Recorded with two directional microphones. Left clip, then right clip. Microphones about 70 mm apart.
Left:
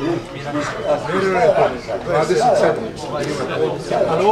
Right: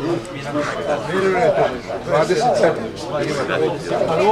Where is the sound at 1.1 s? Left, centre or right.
Centre.